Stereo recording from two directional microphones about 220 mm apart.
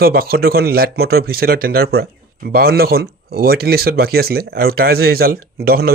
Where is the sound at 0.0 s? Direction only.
45° right (ahead or behind).